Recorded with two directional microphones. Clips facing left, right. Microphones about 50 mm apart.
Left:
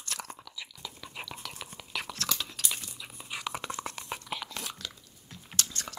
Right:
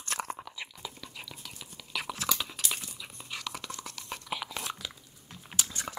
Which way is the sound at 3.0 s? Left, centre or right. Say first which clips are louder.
Left 2 dB; centre.